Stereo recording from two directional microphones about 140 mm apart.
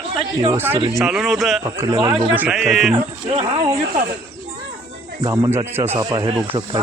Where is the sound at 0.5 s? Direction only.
15° right (ahead or behind).